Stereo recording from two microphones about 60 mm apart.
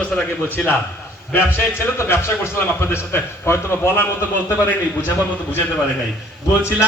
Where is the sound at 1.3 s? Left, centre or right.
Left.